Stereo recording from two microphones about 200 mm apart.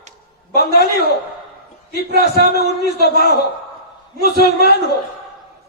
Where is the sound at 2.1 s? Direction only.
55° left (ahead or behind).